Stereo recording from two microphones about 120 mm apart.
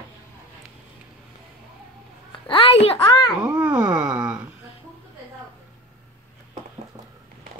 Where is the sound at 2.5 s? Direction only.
50° left (ahead or behind).